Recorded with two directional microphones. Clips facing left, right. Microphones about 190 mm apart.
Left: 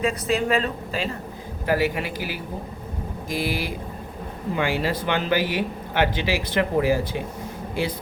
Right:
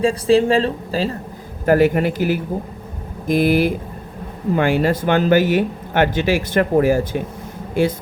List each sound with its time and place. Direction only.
0.0 s a woman's voice: 30° right (ahead or behind)
1.6 s speech: 50° right (ahead or behind)